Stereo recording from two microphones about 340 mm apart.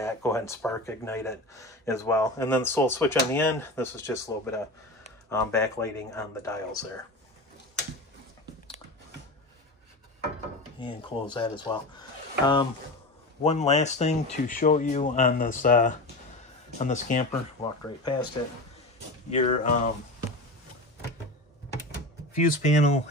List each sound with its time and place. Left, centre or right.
0.0 s speech: centre
10.8 s speech: centre
19.3 s speech: centre
22.3 s speech: left